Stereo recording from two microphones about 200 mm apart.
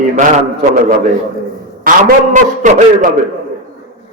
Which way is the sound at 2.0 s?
40° right (ahead or behind).